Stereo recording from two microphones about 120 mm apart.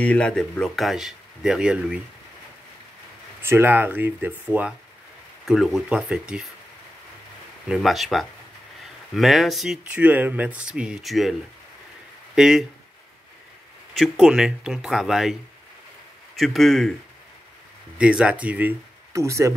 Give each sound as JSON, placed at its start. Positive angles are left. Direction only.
{"t": 0.0, "sound": "speech", "side_deg": 10}
{"t": 3.4, "sound": "speech", "side_deg": -20}
{"t": 7.6, "sound": "speech", "side_deg": 0}
{"t": 12.4, "sound": "speech", "side_deg": -5}
{"t": 13.9, "sound": "speech", "side_deg": 0}
{"t": 16.3, "sound": "speech", "side_deg": 0}
{"t": 17.9, "sound": "speech", "side_deg": -10}
{"t": 19.1, "sound": "speech", "side_deg": -25}